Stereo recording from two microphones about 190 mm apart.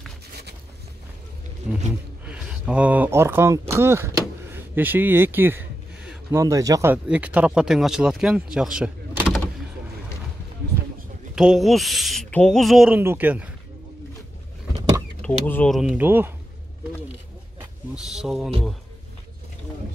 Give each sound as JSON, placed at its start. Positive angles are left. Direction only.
{"t": 2.2, "sound": "speech", "side_deg": -5}
{"t": 11.3, "sound": "speech", "side_deg": -5}
{"t": 15.2, "sound": "speech", "side_deg": 5}
{"t": 17.9, "sound": "speech", "side_deg": 0}